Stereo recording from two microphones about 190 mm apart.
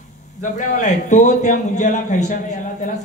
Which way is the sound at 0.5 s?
40° left (ahead or behind).